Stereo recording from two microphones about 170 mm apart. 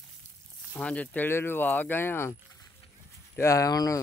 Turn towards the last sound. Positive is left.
turn(degrees=20)  # may be behind; listen again after turning